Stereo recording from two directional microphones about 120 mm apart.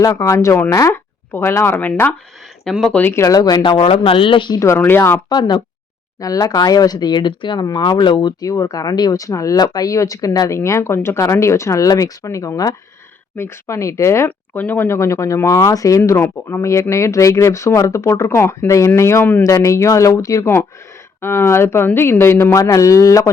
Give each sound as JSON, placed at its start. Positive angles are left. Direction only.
{"t": 0.0, "sound": "speech", "side_deg": 30}
{"t": 4.6, "sound": "speech", "side_deg": 20}
{"t": 5.3, "sound": "speech", "side_deg": 35}